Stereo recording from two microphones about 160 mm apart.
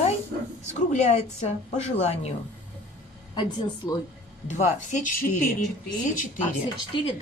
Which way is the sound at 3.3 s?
30° left (ahead or behind).